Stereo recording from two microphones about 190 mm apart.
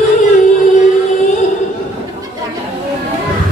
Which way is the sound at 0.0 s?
40° left (ahead or behind).